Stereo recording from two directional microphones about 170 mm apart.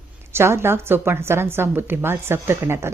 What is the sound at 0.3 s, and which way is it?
A woman's voice, 15° right (ahead or behind).